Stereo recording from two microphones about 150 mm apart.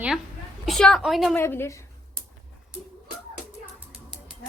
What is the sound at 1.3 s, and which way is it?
Speech, 15° left (ahead or behind).